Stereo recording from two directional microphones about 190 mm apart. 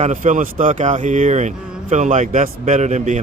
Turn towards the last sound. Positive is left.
turn(degrees=-40)  # may be behind; listen again after turning